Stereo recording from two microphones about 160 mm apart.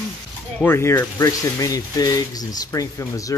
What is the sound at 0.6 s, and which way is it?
Speech, 15° left (ahead or behind).